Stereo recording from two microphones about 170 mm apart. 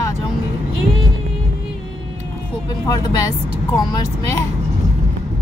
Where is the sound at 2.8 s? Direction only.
25° left (ahead or behind).